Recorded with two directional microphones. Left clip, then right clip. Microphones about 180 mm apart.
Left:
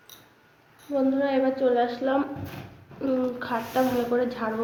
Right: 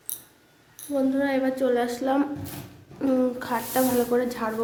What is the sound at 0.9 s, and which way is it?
A woman's voice, 15° right (ahead or behind).